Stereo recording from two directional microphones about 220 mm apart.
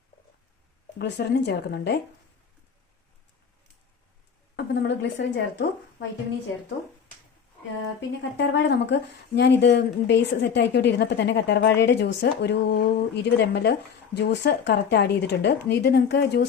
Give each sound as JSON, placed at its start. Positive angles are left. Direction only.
{"t": 0.9, "sound": "a woman's voice", "side_deg": 50}
{"t": 4.5, "sound": "speech", "side_deg": 50}
{"t": 8.2, "sound": "a woman's voice", "side_deg": 50}